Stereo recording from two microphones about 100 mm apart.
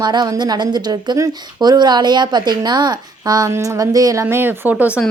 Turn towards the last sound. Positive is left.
turn(degrees=-15)  # may be behind; listen again after turning